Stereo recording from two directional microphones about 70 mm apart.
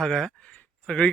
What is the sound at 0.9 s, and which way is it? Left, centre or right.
Speech, centre.